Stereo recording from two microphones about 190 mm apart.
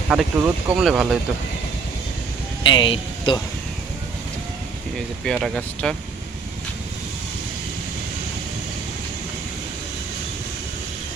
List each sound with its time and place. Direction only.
0.1 s speech: 5° right (ahead or behind)
2.6 s speech: 25° left (ahead or behind)
4.9 s speech: centre (ahead or behind)